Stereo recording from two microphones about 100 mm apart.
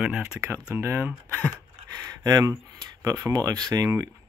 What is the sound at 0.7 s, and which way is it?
Speech, 20° right (ahead or behind).